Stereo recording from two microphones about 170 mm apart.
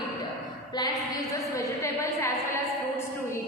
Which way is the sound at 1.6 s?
20° left (ahead or behind).